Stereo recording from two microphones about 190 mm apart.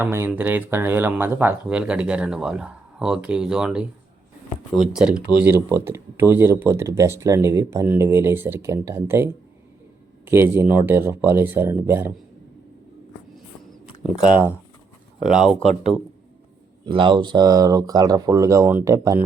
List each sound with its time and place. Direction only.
0.0 s speech: 10° right (ahead or behind)
4.9 s speech: 5° right (ahead or behind)
14.2 s speech: 10° right (ahead or behind)
16.8 s speech: 25° right (ahead or behind)